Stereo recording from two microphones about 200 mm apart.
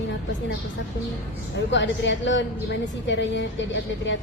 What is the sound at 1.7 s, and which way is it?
A woman's voice, 65° left (ahead or behind).